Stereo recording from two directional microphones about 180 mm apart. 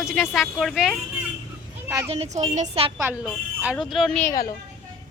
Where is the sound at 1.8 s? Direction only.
15° right (ahead or behind).